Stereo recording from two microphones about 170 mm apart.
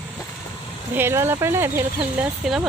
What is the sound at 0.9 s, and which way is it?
Speech, 15° right (ahead or behind).